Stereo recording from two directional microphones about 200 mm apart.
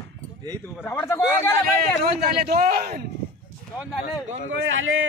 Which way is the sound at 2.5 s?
45° right (ahead or behind).